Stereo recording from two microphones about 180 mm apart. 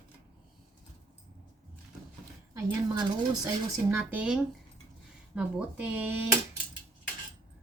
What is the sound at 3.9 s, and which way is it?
Speech, 10° right (ahead or behind).